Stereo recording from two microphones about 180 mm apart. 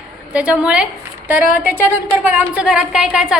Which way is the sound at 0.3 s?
5° right (ahead or behind).